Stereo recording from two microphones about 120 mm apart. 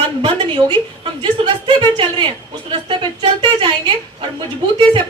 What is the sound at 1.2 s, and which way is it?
Speech, 40° right (ahead or behind).